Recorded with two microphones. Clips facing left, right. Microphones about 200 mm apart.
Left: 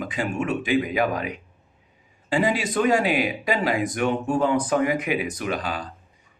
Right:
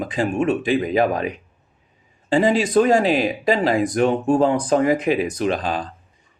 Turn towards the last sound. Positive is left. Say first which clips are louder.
# right 6 dB
turn(degrees=-30)  # may be behind; listen again after turning